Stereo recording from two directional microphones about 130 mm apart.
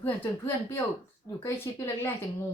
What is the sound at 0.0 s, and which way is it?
A woman's voice, 15° left (ahead or behind).